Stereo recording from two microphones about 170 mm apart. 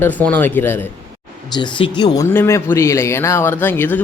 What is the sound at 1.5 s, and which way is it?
Speech, 25° left (ahead or behind).